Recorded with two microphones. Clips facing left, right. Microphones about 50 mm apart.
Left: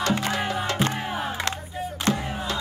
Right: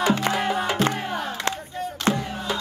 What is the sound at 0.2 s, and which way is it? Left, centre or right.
Music, centre.